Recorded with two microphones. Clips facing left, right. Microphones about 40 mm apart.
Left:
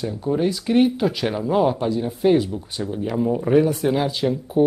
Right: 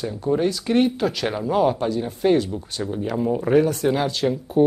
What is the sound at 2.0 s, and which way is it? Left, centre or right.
Speech, centre.